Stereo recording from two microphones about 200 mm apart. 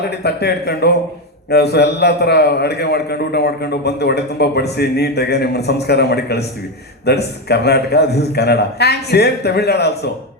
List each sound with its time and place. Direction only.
0.2 s a man's voice: 55° left (ahead or behind)